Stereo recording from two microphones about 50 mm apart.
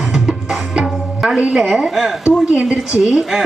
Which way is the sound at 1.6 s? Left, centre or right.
Centre.